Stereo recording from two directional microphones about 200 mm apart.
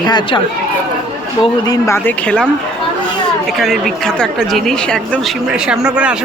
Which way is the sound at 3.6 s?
Centre (ahead or behind).